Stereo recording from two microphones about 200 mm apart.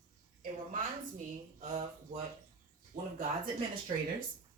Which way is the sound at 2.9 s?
45° right (ahead or behind).